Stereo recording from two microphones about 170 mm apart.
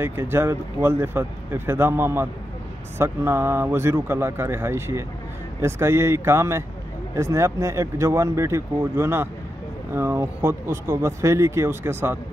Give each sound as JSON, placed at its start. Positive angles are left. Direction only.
{"t": 0.0, "sound": "speech", "side_deg": -10}